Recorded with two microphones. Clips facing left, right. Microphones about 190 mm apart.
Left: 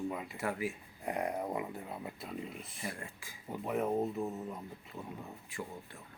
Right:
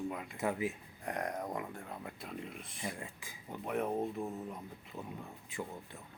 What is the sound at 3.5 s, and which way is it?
Speech, 5° left (ahead or behind).